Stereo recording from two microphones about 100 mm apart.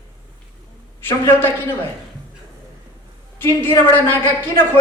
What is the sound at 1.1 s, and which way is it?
Speech, 20° left (ahead or behind).